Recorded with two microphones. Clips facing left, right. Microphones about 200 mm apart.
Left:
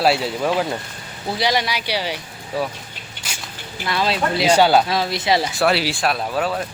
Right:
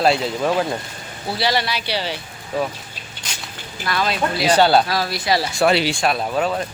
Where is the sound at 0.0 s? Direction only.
10° left (ahead or behind).